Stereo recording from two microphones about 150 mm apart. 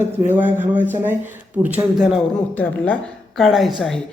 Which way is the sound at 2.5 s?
10° left (ahead or behind).